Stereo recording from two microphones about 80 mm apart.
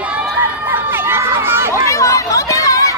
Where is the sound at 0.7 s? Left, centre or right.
Right.